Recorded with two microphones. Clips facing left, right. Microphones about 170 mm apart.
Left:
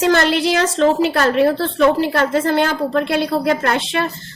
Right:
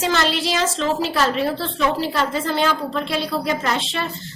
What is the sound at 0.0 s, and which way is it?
A woman's voice, 55° left (ahead or behind).